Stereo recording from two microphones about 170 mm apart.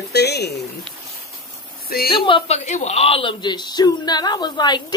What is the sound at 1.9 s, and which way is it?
Speech, 60° left (ahead or behind).